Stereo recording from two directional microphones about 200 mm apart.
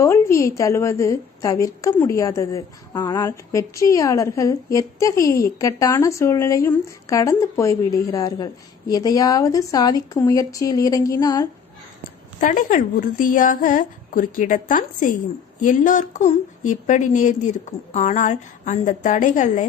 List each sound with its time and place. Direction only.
0.0 s a woman's voice: 15° left (ahead or behind)
12.4 s a woman's voice: 40° left (ahead or behind)